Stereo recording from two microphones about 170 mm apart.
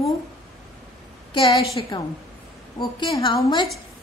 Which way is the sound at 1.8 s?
25° left (ahead or behind).